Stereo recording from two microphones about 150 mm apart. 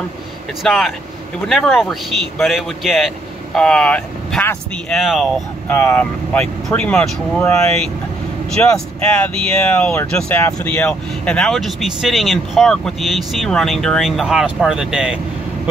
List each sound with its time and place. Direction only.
0.7 s speech: centre (ahead or behind)